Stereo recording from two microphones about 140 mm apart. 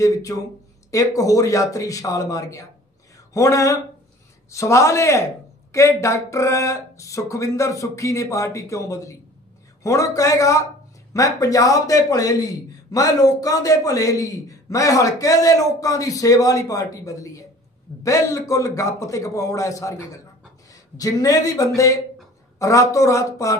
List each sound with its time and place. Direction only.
0.0 s speech: 25° left (ahead or behind)